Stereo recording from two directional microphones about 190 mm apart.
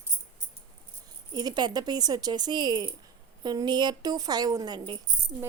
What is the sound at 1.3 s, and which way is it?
Speech, 20° right (ahead or behind).